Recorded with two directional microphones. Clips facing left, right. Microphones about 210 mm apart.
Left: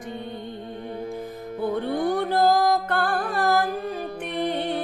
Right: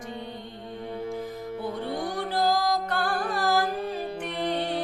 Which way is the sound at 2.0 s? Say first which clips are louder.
Left 7 dB; 55° left (ahead or behind).